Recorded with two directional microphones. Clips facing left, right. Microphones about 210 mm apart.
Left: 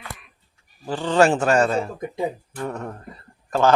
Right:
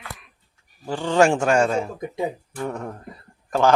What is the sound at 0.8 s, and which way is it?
Speech, 10° right (ahead or behind).